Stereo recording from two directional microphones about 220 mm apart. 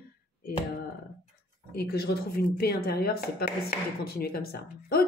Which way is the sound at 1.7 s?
45° left (ahead or behind).